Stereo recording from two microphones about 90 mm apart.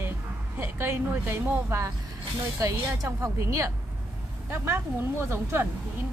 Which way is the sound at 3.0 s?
35° right (ahead or behind).